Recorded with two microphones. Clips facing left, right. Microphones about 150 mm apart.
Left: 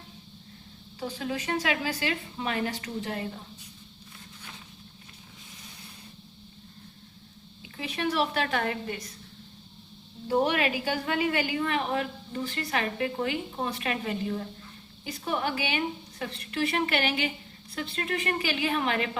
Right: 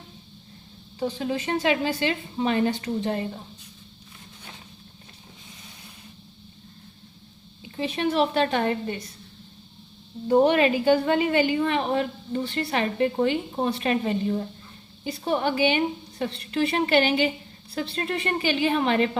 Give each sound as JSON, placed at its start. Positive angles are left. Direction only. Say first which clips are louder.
{"t": 0.9, "sound": "a woman's voice", "louder": "right 5 dB", "side_deg": -25}
{"t": 7.6, "sound": "a woman's voice", "louder": "right 5 dB", "side_deg": -25}
{"t": 10.2, "sound": "a woman's voice", "louder": "right 7 dB", "side_deg": -30}